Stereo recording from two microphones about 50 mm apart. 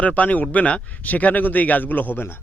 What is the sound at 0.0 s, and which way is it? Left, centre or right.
A man's voice, left.